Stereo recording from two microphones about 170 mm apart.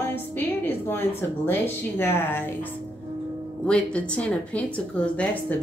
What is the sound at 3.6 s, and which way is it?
A woman's voice, 5° left (ahead or behind).